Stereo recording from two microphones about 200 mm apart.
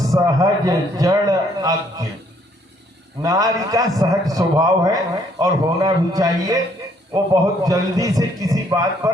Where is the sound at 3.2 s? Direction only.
15° right (ahead or behind).